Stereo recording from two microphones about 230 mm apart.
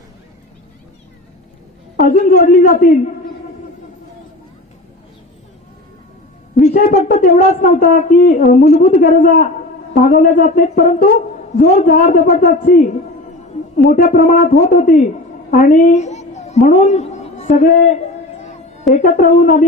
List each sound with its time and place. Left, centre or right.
2.0 s a woman's voice: left
6.5 s a woman's voice: left
18.9 s a woman's voice: left